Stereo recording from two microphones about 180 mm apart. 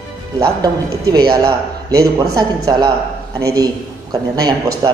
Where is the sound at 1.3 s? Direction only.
20° right (ahead or behind).